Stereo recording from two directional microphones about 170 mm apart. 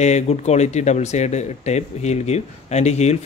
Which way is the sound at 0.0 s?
40° left (ahead or behind).